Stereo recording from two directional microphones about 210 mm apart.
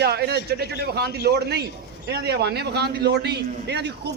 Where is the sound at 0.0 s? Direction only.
50° right (ahead or behind).